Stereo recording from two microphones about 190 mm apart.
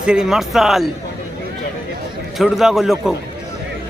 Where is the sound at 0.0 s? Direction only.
5° right (ahead or behind).